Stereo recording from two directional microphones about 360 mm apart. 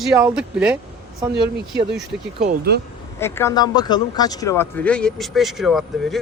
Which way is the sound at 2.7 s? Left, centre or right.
Right.